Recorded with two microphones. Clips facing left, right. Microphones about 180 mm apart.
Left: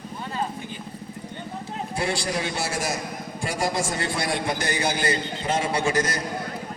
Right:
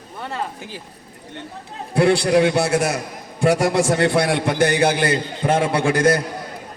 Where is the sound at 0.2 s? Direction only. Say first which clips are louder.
Right 3 dB; 75° right (ahead or behind).